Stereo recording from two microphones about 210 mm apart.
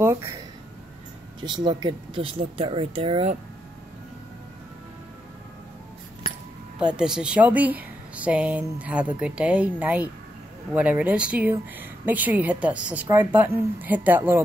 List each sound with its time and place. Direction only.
0.0 s speech: 10° right (ahead or behind)
1.4 s speech: 20° right (ahead or behind)
7.0 s a woman's voice: 5° right (ahead or behind)